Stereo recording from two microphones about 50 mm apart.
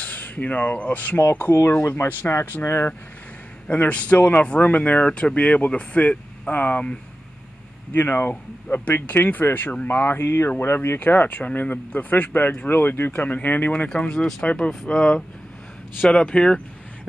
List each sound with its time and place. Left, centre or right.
0.0 s speech: left
1.5 s speech: left
1.9 s speech: left
3.6 s speech: left
7.9 s speech: left
13.8 s speech: centre